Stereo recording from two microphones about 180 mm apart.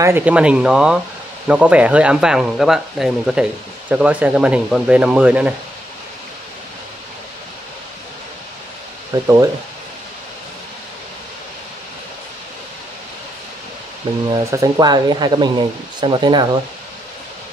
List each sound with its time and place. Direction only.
0.0 s speech: 10° right (ahead or behind)
9.1 s speech: 20° right (ahead or behind)
14.3 s speech: 20° right (ahead or behind)